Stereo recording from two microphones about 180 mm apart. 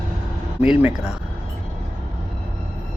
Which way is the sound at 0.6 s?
5° right (ahead or behind).